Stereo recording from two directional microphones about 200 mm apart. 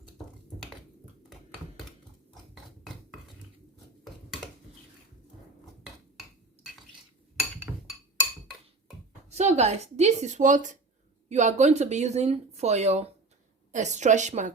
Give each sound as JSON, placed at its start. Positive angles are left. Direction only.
{"t": 1.3, "sound": "a sound", "side_deg": 0}
{"t": 5.8, "sound": "hammer", "side_deg": 0}
{"t": 9.3, "sound": "speech", "side_deg": -35}